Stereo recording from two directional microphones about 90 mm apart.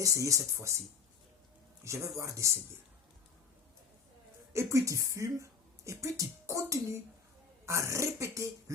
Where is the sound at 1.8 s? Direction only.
35° right (ahead or behind).